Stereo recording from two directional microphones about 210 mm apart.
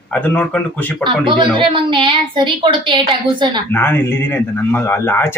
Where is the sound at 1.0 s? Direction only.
25° right (ahead or behind).